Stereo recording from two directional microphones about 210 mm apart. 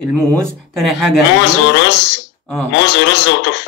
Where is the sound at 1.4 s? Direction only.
55° left (ahead or behind).